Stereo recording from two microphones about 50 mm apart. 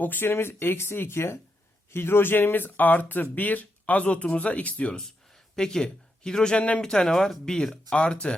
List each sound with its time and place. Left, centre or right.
0.0 s speech: left
4.9 s a man's voice: centre
6.6 s speech: left
6.8 s speech: centre